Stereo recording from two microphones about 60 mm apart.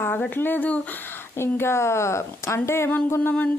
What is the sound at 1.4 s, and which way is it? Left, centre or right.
A woman's voice, left.